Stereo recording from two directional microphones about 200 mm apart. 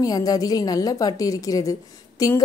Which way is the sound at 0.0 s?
20° left (ahead or behind).